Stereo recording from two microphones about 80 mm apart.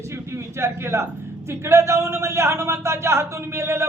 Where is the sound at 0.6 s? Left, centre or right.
Right.